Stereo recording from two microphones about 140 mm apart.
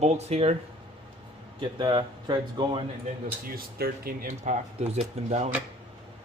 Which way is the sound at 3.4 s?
90° right.